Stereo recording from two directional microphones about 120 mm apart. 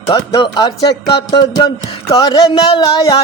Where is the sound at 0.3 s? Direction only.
35° left (ahead or behind).